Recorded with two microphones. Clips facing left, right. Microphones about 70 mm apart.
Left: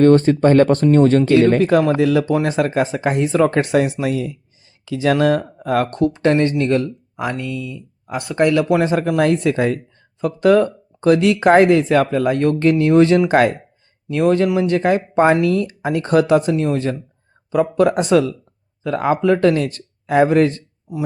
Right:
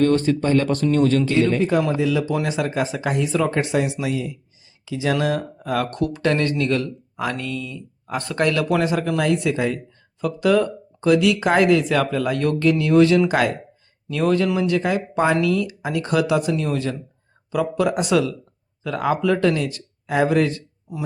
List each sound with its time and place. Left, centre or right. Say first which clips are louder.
0.0 s speech: left 6 dB; left
1.3 s speech: left 6 dB; left
2.3 s speech: left 5 dB; left
14.7 s speech: left 4 dB; left